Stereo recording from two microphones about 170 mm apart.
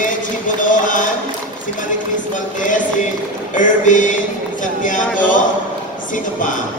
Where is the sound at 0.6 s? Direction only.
50° left (ahead or behind).